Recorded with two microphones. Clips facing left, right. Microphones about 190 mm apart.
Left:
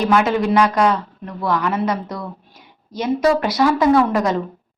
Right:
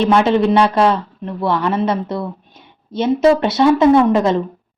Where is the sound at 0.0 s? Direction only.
30° right (ahead or behind).